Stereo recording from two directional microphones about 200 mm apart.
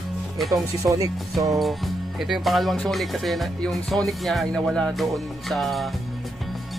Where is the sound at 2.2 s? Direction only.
Centre (ahead or behind).